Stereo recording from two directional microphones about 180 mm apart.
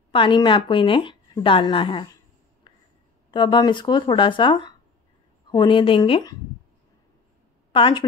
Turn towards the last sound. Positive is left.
turn(degrees=30)  # may be behind; listen again after turning